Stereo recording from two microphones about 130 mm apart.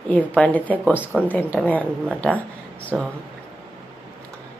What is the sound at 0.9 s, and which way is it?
Speech, 10° right (ahead or behind).